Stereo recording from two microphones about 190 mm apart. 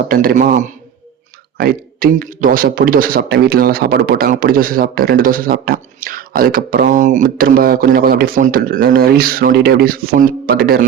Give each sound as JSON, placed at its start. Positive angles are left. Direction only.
{"t": 0.1, "sound": "a man's voice", "side_deg": -50}